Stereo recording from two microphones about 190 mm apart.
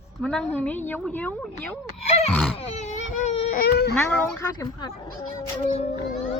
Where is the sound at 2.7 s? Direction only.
35° left (ahead or behind).